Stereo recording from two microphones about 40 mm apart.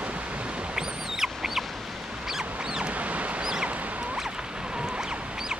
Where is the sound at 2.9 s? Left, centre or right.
Right.